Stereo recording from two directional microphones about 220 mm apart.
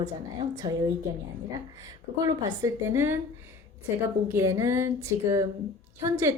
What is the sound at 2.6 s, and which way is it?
A woman's voice, 15° right (ahead or behind).